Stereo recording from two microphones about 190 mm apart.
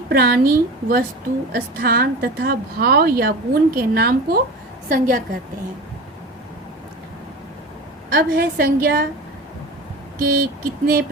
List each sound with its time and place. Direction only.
0.1 s a woman's voice: 55° right (ahead or behind)
8.1 s a woman's voice: 55° right (ahead or behind)
10.2 s a woman's voice: 50° right (ahead or behind)